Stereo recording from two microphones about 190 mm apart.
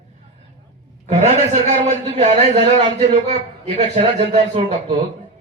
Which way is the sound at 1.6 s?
35° right (ahead or behind).